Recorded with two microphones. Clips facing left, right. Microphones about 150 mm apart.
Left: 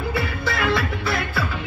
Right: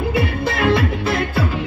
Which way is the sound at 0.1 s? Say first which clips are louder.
Right 5 dB; 25° right (ahead or behind).